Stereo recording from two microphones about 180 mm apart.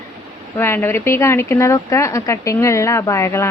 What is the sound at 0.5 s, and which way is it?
A woman's voice, 10° left (ahead or behind).